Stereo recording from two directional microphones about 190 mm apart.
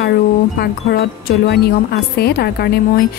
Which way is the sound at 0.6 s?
60° left (ahead or behind).